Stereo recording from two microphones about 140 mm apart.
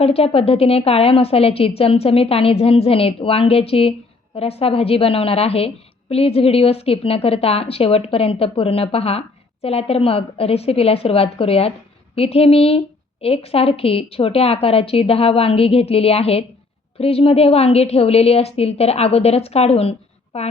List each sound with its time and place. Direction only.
0.0 s a woman's voice: 45° left (ahead or behind)